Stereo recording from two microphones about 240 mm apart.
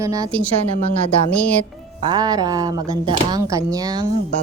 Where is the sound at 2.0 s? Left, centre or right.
Centre.